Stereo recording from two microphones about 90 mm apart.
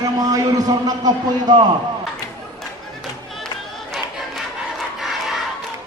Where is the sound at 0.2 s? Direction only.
40° right (ahead or behind).